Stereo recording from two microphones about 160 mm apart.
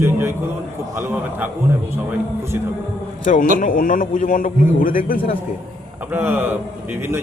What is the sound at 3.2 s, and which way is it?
A man's voice, 55° left (ahead or behind).